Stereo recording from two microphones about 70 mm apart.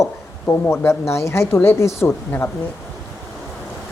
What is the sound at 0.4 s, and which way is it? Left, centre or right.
Speech, left.